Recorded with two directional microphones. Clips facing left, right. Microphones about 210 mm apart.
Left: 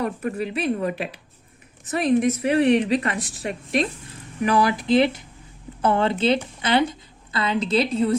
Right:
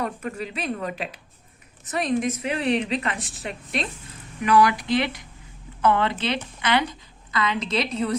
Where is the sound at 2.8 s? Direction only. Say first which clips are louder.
Left 4 dB; 40° left (ahead or behind).